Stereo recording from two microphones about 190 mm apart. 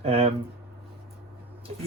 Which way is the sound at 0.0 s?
30° right (ahead or behind).